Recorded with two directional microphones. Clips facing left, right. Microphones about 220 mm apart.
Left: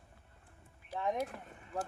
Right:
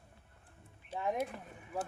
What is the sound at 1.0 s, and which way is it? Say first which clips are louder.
Speech: even; 5° right (ahead or behind).